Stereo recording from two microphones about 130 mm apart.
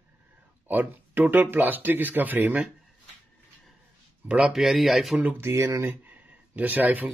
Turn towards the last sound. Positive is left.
turn(degrees=-15)  # may be behind; listen again after turning